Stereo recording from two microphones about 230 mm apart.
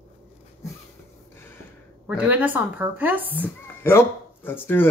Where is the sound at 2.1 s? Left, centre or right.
Centre.